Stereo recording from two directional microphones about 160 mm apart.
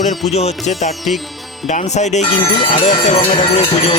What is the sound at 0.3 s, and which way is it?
Speech, 45° left (ahead or behind).